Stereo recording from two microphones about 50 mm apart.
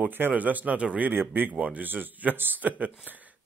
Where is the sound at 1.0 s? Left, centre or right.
Right.